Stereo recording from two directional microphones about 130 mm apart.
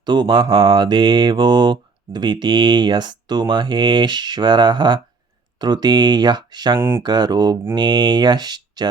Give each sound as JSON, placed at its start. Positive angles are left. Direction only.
{"t": 0.0, "sound": "mantra", "side_deg": -35}
{"t": 6.7, "sound": "speech", "side_deg": -20}
{"t": 7.0, "sound": "mantra", "side_deg": -30}